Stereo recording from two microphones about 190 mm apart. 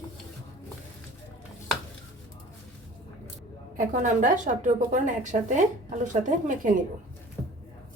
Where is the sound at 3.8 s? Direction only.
45° right (ahead or behind).